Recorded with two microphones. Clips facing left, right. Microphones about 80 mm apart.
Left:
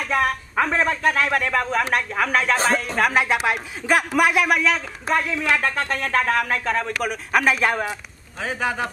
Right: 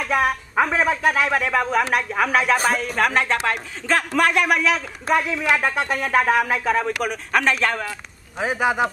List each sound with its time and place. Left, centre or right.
0.0 s speech: centre
3.0 s speech: centre
8.4 s speech: centre